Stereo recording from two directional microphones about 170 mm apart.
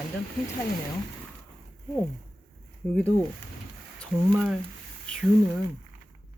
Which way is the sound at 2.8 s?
5° left (ahead or behind).